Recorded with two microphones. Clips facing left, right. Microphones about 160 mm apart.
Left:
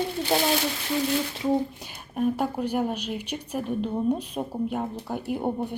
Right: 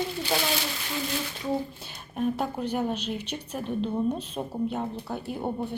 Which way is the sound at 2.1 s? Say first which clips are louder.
Left 3 dB; 10° left (ahead or behind).